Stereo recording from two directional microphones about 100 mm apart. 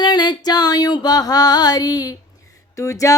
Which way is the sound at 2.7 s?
30° left (ahead or behind).